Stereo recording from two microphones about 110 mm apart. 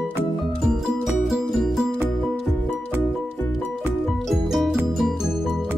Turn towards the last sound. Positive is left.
turn(degrees=-5)  # may be behind; listen again after turning